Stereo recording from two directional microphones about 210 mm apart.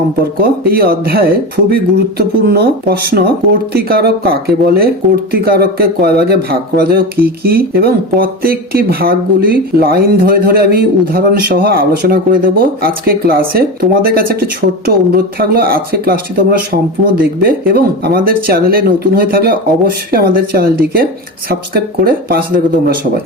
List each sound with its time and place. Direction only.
0.4 s speech: 45° right (ahead or behind)